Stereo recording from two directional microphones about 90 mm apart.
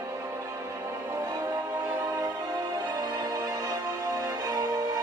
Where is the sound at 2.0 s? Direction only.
40° right (ahead or behind).